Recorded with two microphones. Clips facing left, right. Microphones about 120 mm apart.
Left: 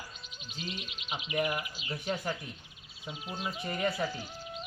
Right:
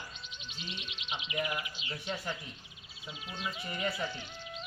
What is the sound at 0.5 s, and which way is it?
Speech, 40° left (ahead or behind).